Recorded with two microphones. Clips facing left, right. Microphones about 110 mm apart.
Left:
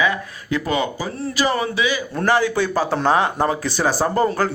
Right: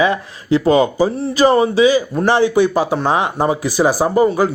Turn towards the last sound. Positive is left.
turn(degrees=-10)  # may be behind; listen again after turning